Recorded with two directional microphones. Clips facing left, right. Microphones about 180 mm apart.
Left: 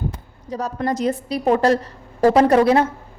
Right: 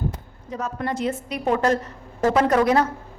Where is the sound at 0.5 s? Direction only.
35° left (ahead or behind).